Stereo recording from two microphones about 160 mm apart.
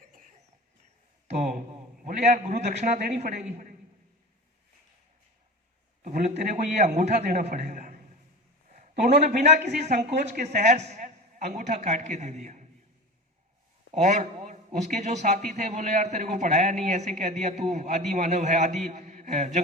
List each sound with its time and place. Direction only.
1.3 s a man's voice: 50° right (ahead or behind)
6.0 s a man's voice: 50° right (ahead or behind)
13.9 s a man's voice: 45° right (ahead or behind)